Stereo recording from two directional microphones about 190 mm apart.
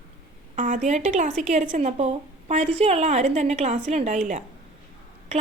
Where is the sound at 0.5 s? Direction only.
45° right (ahead or behind).